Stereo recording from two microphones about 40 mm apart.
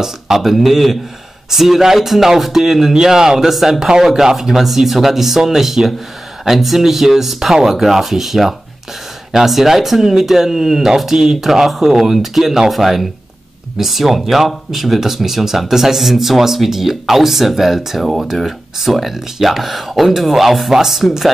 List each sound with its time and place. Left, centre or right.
0.0 s speech: centre